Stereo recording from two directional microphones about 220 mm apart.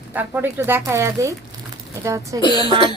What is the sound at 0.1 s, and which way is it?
Speech, 10° right (ahead or behind).